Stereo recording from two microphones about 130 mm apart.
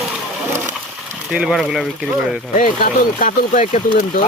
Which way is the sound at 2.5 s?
85° left.